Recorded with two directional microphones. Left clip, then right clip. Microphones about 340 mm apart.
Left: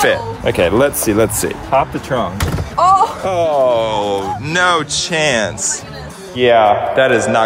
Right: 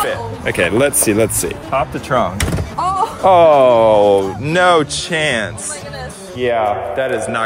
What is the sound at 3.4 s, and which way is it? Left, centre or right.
Speech, right.